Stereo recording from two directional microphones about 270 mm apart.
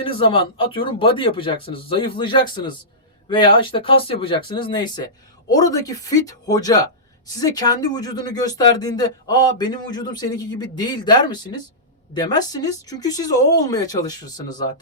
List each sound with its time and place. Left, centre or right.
0.0 s speech: centre